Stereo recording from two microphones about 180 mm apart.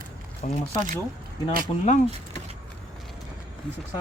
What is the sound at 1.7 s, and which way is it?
Speech, 30° left (ahead or behind).